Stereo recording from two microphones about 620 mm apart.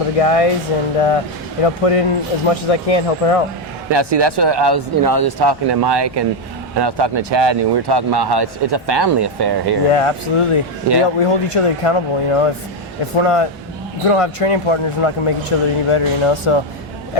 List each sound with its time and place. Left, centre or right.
0.2 s speech: left
3.9 s speech: right
9.9 s speech: left